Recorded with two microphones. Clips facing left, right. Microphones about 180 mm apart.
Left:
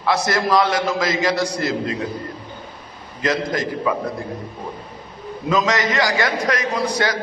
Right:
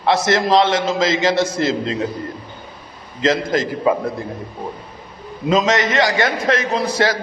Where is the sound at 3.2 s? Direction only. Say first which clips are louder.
Right 4 dB; 25° right (ahead or behind).